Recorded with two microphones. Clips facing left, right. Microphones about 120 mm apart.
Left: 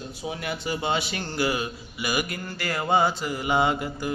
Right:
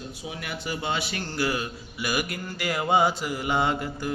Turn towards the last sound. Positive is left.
turn(degrees=5)  # may be behind; listen again after turning